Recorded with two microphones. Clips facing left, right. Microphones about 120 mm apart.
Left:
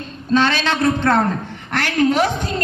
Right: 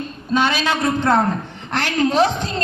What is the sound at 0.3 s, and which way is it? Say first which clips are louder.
A man's voice: left 1 dB; 10° right (ahead or behind).